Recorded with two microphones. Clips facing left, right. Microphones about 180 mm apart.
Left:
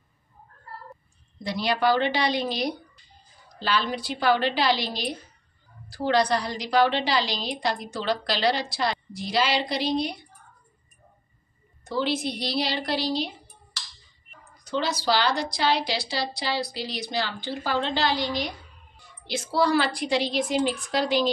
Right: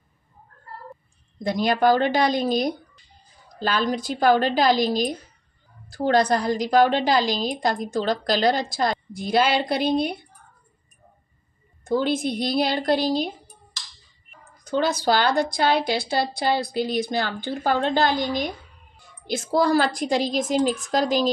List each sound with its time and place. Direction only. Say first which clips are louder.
1.4 s a woman's voice: right 4 dB; 45° right (ahead or behind)
11.8 s a woman's voice: right 4 dB; 50° right (ahead or behind)
14.6 s a woman's voice: right 5 dB; 50° right (ahead or behind)